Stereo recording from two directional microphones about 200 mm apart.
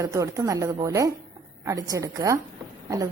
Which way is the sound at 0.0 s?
15° right (ahead or behind).